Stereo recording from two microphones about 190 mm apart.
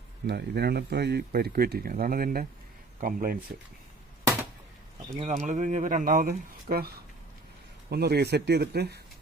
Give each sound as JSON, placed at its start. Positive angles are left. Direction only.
{"t": 0.3, "sound": "speech", "side_deg": -60}
{"t": 5.2, "sound": "speech", "side_deg": -40}